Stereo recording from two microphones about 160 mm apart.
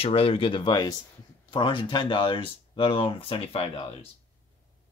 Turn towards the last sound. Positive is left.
turn(degrees=35)  # may be behind; listen again after turning